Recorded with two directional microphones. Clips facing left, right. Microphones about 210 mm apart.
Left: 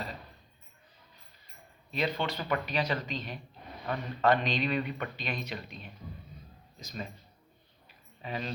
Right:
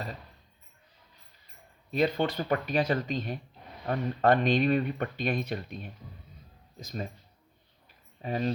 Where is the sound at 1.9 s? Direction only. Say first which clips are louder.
Right 5 dB; 50° right (ahead or behind).